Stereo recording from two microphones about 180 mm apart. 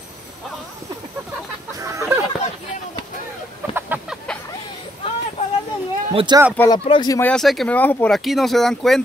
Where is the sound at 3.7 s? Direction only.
5° right (ahead or behind).